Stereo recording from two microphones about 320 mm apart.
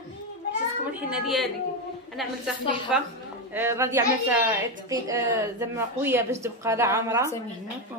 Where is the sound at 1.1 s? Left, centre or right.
Centre.